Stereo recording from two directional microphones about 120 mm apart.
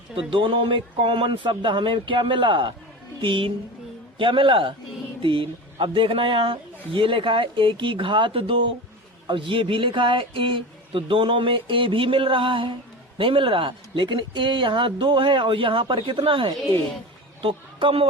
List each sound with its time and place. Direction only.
0.2 s a woman's voice: 45° right (ahead or behind)